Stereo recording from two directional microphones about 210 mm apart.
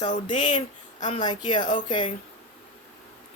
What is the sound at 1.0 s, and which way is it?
Speech, 35° left (ahead or behind).